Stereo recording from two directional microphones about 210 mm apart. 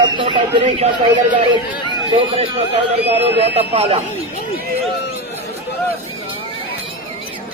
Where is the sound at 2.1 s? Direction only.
25° right (ahead or behind).